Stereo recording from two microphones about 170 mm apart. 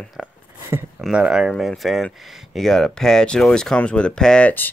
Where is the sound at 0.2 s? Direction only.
15° right (ahead or behind).